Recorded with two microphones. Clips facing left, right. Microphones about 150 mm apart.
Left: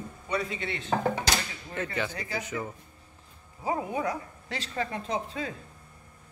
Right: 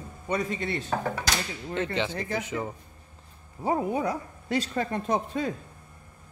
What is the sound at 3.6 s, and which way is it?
Speech, 35° right (ahead or behind).